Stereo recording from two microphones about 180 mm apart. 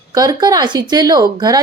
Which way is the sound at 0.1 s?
20° right (ahead or behind).